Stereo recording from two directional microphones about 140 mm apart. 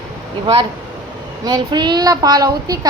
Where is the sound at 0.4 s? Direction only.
35° right (ahead or behind).